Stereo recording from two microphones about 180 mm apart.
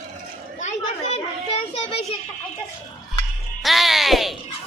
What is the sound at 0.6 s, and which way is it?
Children playing, 40° left (ahead or behind).